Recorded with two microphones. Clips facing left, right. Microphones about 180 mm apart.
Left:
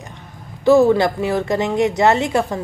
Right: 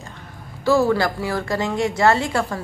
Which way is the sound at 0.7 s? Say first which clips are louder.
Left 5 dB; 20° left (ahead or behind).